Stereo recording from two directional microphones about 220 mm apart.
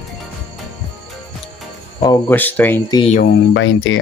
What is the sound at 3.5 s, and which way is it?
Speech, 60° left (ahead or behind).